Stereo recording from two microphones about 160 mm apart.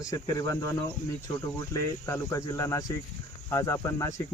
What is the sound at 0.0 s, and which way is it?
Speech, 20° left (ahead or behind).